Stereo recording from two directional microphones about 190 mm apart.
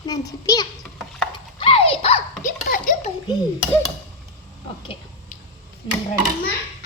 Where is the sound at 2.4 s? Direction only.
45° left (ahead or behind).